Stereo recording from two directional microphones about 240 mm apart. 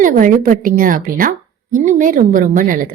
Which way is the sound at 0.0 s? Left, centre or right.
Right.